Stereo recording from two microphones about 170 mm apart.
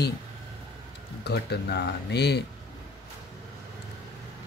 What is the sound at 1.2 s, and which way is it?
Speech, 75° left (ahead or behind).